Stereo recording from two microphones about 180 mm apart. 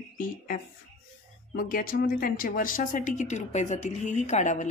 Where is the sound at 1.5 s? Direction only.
55° left (ahead or behind).